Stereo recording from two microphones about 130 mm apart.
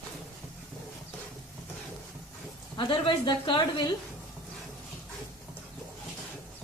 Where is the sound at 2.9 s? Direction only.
40° left (ahead or behind).